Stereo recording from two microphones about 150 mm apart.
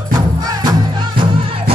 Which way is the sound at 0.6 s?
30° right (ahead or behind).